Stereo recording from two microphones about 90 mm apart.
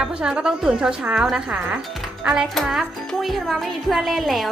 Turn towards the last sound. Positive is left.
turn(degrees=0)  # may be behind; listen again after turning